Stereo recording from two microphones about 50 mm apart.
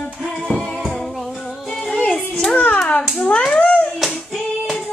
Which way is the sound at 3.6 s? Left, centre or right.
Left.